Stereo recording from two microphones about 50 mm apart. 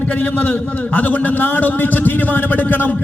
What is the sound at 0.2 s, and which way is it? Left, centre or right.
A man's voice, left.